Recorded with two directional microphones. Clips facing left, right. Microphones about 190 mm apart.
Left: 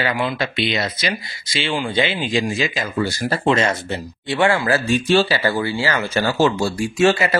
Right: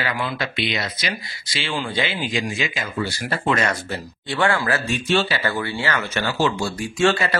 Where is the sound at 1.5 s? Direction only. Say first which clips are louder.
Left 4 dB; 20° left (ahead or behind).